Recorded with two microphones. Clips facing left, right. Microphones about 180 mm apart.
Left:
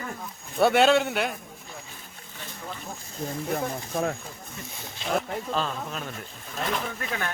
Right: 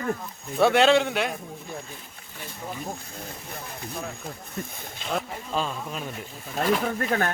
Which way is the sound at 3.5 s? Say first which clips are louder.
Left 9 dB; 60° left (ahead or behind).